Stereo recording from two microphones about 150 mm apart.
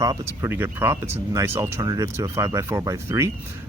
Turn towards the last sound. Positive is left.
turn(degrees=-20)  # may be behind; listen again after turning